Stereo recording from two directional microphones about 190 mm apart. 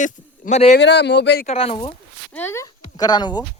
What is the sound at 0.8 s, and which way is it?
Speech, 65° left (ahead or behind).